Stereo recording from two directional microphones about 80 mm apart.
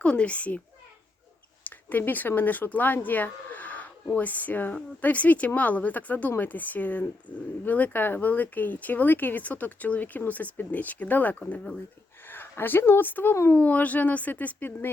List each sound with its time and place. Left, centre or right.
0.0 s a child's voice: centre
1.9 s speech: left
13.3 s speech: left
13.6 s speech: left